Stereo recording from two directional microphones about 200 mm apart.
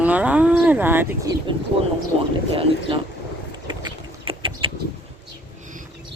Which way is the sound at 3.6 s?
25° right (ahead or behind).